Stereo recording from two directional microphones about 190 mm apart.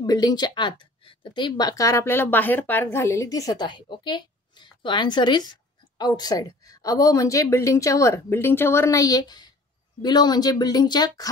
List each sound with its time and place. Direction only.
0.0 s a woman's voice: 20° left (ahead or behind)